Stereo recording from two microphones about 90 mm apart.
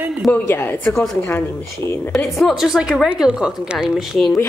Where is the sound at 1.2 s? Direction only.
25° left (ahead or behind).